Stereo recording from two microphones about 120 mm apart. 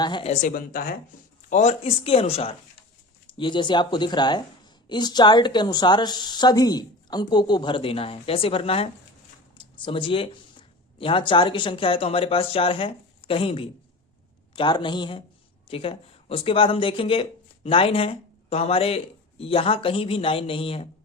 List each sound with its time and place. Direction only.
0.0 s a woman's voice: 40° left (ahead or behind)
0.3 s a woman's voice: 90° left
1.5 s speech: 75° left (ahead or behind); by 2.6 s 55° left (ahead or behind)
3.2 s speech: 45° left (ahead or behind)